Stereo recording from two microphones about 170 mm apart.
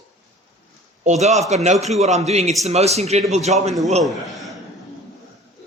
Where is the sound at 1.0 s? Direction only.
40° right (ahead or behind).